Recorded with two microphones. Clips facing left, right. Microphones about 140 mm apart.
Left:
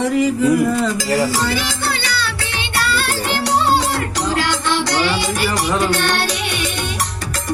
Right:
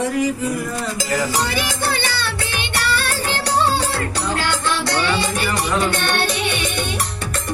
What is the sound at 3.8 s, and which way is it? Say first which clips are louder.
Music: left 2 dB; 30° right (ahead or behind).